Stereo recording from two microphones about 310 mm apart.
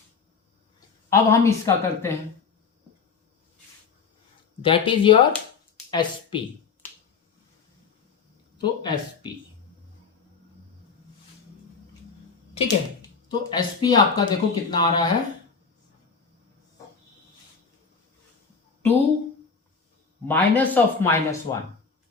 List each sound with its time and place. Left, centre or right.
1.1 s speech: centre
4.6 s speech: centre
8.5 s speech: centre
12.5 s speech: centre
20.2 s speech: centre